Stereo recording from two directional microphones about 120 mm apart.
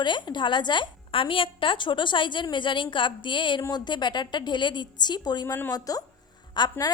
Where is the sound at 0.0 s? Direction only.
40° left (ahead or behind).